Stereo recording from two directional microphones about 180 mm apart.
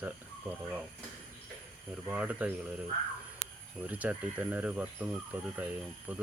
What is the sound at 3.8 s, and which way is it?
Speech, 10° right (ahead or behind).